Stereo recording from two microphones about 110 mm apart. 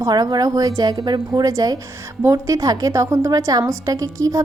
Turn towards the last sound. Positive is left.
turn(degrees=-30)  # may be behind; listen again after turning